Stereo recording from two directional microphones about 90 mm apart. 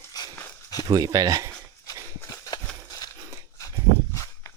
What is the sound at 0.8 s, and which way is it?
Speech, 45° right (ahead or behind).